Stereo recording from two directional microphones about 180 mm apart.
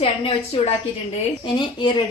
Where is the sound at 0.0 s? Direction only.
30° left (ahead or behind).